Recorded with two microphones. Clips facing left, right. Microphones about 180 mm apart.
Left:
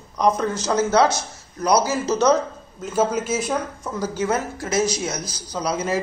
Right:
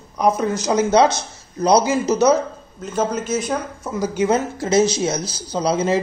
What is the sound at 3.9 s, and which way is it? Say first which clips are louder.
Speech: right 5 dB; 15° right (ahead or behind).